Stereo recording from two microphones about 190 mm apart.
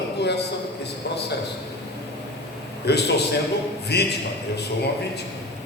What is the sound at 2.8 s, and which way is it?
A man's voice, 60° left (ahead or behind).